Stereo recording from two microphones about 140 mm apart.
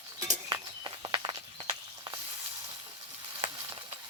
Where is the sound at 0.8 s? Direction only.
35° right (ahead or behind).